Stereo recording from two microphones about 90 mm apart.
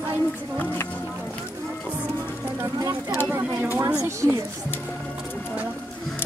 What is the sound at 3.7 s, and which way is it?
Speech, 30° right (ahead or behind).